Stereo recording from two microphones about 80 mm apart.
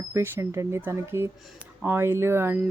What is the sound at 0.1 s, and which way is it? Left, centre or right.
Speech, right.